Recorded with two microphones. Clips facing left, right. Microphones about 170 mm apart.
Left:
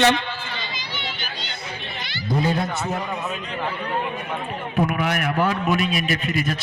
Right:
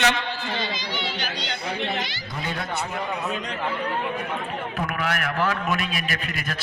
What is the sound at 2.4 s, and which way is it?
Speech, 35° left (ahead or behind).